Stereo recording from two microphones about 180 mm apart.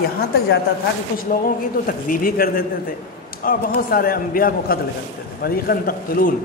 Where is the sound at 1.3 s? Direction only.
50° left (ahead or behind).